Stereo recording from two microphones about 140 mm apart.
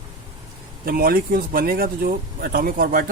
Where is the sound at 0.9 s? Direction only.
90° right.